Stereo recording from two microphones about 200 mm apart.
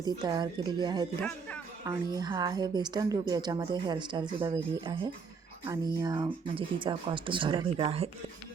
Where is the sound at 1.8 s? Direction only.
20° right (ahead or behind).